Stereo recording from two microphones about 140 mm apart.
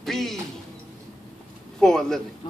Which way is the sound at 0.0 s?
Centre (ahead or behind).